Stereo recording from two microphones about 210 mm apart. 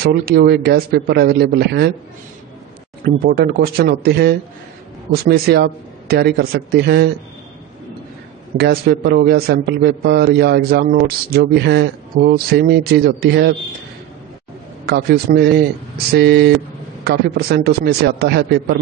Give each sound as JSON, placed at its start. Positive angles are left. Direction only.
{"t": 0.0, "sound": "a man's voice", "side_deg": -45}
{"t": 3.3, "sound": "a man's voice", "side_deg": -45}
{"t": 8.5, "sound": "a man's voice", "side_deg": -50}
{"t": 14.9, "sound": "a man's voice", "side_deg": -50}